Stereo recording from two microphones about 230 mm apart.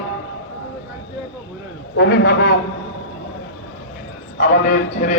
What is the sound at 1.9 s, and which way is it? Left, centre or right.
Speech, left.